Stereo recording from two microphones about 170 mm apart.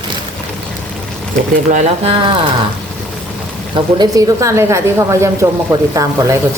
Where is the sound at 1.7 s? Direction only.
45° right (ahead or behind).